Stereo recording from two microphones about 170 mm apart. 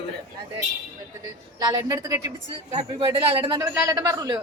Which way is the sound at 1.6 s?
25° right (ahead or behind).